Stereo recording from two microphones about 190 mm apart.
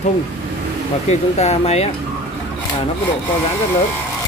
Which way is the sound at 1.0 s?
35° left (ahead or behind).